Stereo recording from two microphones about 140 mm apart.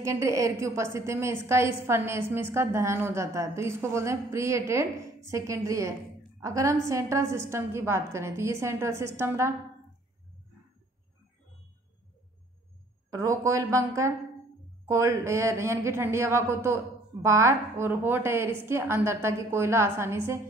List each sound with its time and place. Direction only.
0.0 s a woman's voice: 20° right (ahead or behind)
13.1 s a woman's voice: 20° right (ahead or behind)